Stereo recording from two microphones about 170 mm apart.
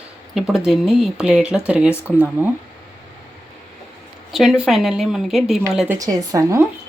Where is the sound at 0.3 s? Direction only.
5° right (ahead or behind).